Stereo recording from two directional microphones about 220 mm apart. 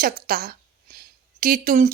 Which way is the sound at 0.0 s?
40° right (ahead or behind).